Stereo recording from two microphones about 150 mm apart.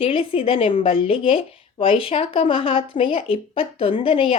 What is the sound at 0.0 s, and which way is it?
Speech, 40° left (ahead or behind).